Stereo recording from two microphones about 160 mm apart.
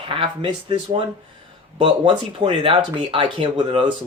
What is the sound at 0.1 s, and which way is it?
Speech, 30° right (ahead or behind).